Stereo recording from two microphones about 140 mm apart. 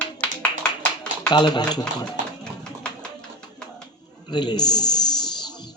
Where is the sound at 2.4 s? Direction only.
5° left (ahead or behind).